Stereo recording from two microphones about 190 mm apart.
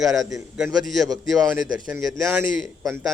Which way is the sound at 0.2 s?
20° right (ahead or behind).